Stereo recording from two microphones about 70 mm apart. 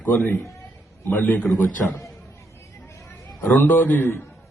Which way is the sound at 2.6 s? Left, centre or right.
Left.